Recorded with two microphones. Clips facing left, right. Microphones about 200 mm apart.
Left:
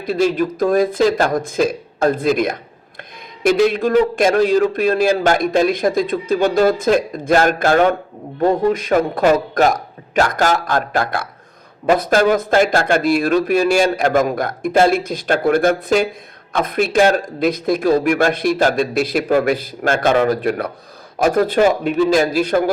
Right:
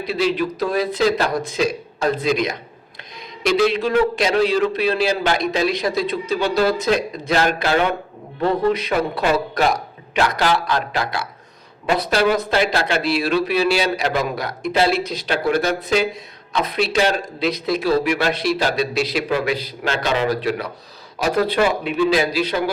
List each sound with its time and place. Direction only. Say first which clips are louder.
0.0 s a man's voice: left 3 dB; 45° left (ahead or behind)
3.4 s a man's voice: left 3 dB; 50° left (ahead or behind)